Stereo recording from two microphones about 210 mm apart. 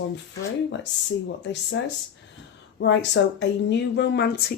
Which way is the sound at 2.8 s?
60° left (ahead or behind).